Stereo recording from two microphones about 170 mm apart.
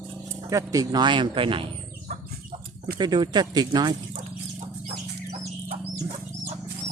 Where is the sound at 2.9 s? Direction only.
25° right (ahead or behind).